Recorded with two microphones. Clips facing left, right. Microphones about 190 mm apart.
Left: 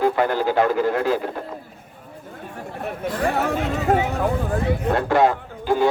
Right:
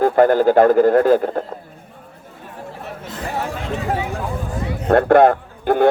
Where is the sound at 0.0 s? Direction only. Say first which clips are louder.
Right 7 dB; 50° right (ahead or behind).